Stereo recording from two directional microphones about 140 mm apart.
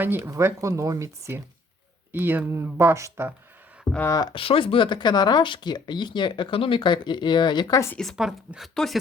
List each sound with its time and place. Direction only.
0.0 s speech: 15° right (ahead or behind)
4.1 s speech: 30° left (ahead or behind)
7.9 s speech: centre (ahead or behind)